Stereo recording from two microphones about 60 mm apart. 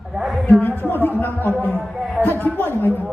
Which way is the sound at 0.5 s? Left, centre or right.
Left.